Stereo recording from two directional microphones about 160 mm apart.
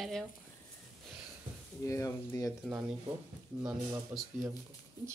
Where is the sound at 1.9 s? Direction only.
20° left (ahead or behind).